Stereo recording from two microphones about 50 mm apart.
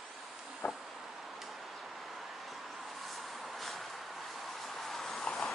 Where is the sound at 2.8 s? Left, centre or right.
Centre.